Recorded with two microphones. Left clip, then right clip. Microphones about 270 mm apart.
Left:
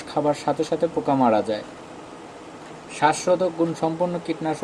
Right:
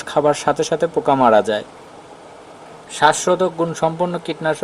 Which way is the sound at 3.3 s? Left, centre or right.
Right.